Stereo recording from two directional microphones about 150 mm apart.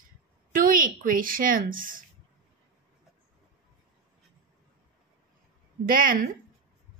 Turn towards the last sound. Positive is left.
turn(degrees=-65)  # may be behind; listen again after turning